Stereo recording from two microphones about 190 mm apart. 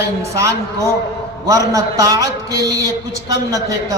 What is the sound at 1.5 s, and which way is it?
A man's voice, 20° right (ahead or behind).